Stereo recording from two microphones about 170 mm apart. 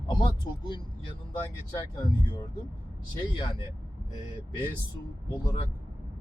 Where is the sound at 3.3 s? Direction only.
30° left (ahead or behind).